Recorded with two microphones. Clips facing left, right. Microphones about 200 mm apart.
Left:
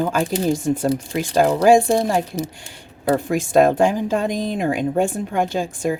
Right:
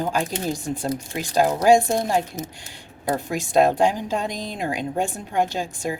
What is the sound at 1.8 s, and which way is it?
Speech, 35° left (ahead or behind).